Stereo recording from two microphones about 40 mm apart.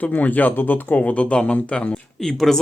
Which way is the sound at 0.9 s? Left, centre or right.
Left.